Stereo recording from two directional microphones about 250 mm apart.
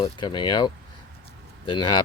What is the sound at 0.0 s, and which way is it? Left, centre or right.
Speech, centre.